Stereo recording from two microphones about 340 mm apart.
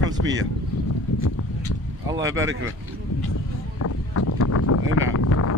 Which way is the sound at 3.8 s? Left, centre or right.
Left.